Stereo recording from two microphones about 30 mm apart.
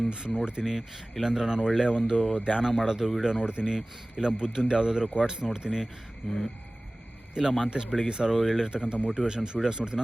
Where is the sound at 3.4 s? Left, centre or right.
Right.